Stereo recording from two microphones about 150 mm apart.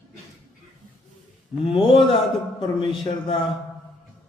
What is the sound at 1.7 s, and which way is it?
A man's voice, 35° left (ahead or behind).